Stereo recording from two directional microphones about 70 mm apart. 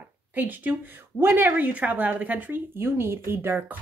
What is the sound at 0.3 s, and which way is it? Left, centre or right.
A woman's voice, right.